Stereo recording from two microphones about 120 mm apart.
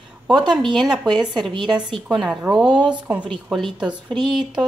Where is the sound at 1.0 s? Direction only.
35° right (ahead or behind).